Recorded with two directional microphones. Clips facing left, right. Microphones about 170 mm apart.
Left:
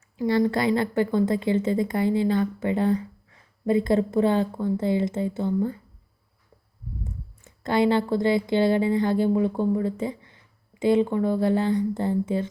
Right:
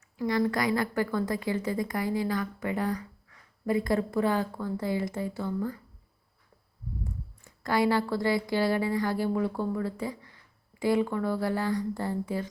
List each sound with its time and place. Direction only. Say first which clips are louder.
0.2 s a woman's voice: left 5 dB; 25° left (ahead or behind)
7.4 s a woman's voice: left 4 dB; 25° left (ahead or behind)